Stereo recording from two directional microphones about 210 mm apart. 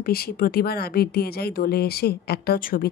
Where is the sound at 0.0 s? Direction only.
45° left (ahead or behind).